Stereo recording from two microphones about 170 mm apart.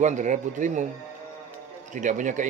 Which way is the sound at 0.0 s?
45° right (ahead or behind).